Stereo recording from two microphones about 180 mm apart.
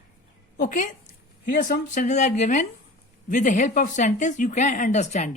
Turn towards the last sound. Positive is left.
turn(degrees=40)  # may be behind; listen again after turning